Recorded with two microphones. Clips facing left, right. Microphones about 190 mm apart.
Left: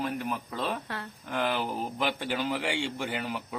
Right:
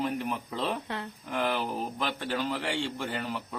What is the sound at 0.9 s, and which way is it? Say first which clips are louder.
Speech: right 2 dB; 20° right (ahead or behind).